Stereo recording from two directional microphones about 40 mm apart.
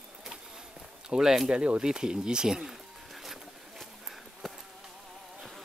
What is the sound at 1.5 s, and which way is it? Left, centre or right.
Speech, right.